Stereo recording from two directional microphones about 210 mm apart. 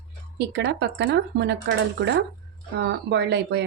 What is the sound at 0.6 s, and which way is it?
Speech, 50° right (ahead or behind).